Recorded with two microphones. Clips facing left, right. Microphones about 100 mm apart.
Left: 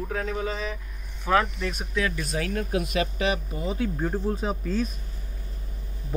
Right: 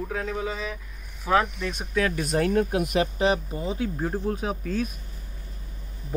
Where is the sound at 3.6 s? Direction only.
10° right (ahead or behind).